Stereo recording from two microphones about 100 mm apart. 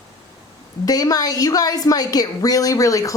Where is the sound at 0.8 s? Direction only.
40° left (ahead or behind).